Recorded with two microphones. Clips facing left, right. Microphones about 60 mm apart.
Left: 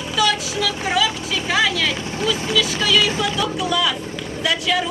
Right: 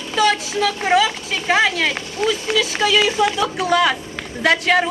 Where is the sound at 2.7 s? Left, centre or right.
Right.